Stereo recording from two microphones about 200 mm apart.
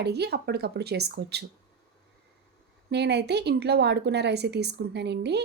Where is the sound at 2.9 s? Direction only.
55° right (ahead or behind).